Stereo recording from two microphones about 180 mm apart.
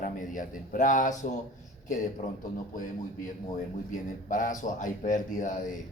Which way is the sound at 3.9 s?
45° left (ahead or behind).